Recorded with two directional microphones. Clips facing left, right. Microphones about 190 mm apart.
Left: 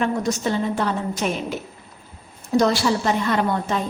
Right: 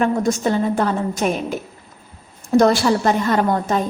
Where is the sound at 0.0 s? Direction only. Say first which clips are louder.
Right 4 dB; 50° right (ahead or behind).